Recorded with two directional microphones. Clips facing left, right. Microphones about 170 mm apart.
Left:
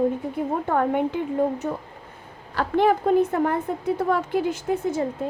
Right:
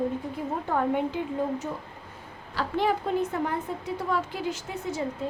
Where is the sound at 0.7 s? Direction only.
55° left (ahead or behind).